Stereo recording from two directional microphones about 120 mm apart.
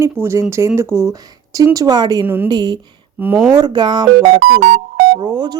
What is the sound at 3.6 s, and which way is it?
A woman's voice, 40° right (ahead or behind).